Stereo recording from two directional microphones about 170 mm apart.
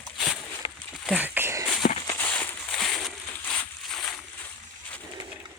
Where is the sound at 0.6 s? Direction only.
30° left (ahead or behind).